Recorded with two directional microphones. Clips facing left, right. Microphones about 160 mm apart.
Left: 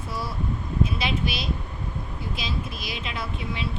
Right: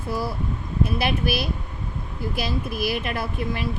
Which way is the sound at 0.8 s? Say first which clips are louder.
Right 4 dB; 60° right (ahead or behind).